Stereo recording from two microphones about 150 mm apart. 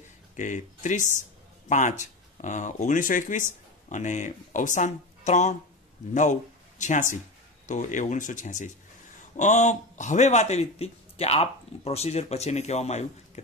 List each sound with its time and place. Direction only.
0.4 s speech: 55° left (ahead or behind)
6.8 s speech: 55° left (ahead or behind)